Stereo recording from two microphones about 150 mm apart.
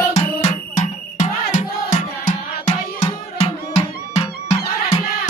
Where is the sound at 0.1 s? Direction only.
50° left (ahead or behind).